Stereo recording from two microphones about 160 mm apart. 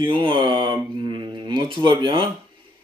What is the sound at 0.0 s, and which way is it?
Speech, 30° right (ahead or behind).